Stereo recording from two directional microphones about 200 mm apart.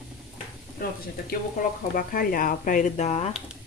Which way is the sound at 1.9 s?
45° left (ahead or behind).